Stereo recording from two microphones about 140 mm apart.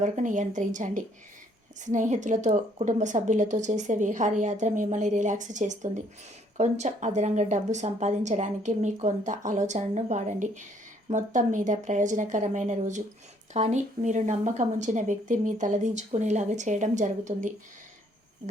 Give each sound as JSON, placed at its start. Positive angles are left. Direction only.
{"t": 0.0, "sound": "a woman's voice", "side_deg": -60}